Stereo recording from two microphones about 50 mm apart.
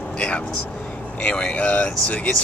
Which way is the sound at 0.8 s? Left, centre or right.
Left.